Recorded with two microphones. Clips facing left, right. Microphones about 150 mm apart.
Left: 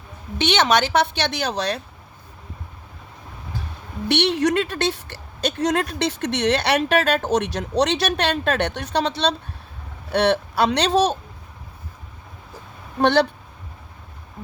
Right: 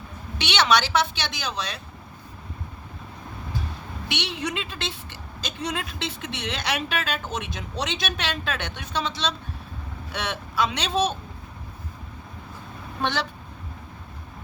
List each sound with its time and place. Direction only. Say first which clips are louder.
0.3 s a woman's voice: left 4 dB; 50° left (ahead or behind)
4.1 s speech: left 11 dB; 65° left (ahead or behind)
13.0 s a woman's voice: left 10 dB; 65° left (ahead or behind)